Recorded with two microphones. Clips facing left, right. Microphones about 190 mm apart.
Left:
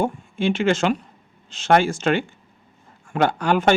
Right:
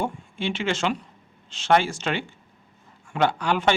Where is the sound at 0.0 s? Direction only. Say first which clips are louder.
Left 6 dB; 45° left (ahead or behind).